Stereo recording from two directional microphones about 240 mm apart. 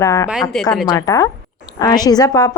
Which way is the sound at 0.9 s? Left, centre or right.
Centre.